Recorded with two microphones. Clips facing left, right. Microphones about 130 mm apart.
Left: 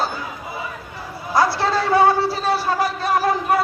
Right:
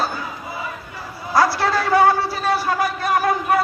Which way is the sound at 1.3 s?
25° left (ahead or behind).